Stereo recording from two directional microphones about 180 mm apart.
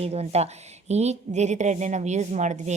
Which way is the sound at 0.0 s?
35° right (ahead or behind).